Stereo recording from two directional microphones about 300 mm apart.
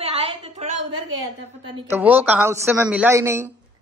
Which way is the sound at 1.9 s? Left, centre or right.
Centre.